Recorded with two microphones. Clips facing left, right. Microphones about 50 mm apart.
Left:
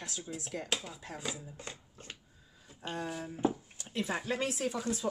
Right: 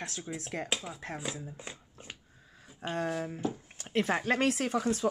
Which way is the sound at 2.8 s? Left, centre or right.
Right.